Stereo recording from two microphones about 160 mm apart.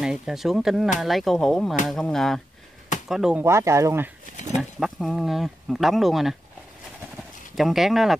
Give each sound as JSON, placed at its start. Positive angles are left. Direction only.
{"t": 0.0, "sound": "speech", "side_deg": -5}
{"t": 3.4, "sound": "speech", "side_deg": -15}
{"t": 4.6, "sound": "speech", "side_deg": 0}
{"t": 7.5, "sound": "speech", "side_deg": 0}